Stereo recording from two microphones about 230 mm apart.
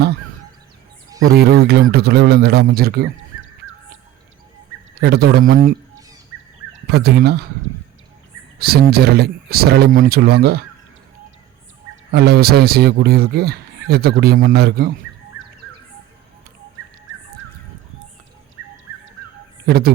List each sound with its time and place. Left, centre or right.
1.3 s a man's voice: right
4.9 s a man's voice: right
6.3 s a sound: centre
6.9 s a man's voice: right
8.5 s a man's voice: right
12.1 s a man's voice: right
19.6 s speech: right